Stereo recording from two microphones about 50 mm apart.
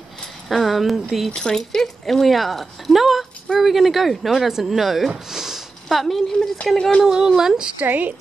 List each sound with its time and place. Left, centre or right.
0.5 s speech: centre
1.3 s speech: centre
5.3 s sniff: centre
7.1 s speech: centre
7.8 s a woman's voice: right